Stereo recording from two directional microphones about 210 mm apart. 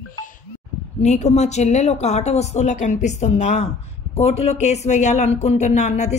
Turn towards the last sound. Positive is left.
turn(degrees=35)  # may be behind; listen again after turning